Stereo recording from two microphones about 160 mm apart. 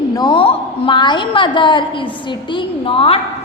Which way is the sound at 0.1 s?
25° left (ahead or behind).